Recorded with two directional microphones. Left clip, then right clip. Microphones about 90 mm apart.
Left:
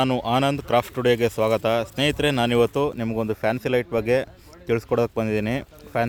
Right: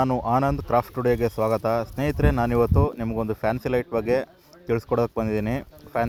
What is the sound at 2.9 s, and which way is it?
A man's voice, 15° left (ahead or behind).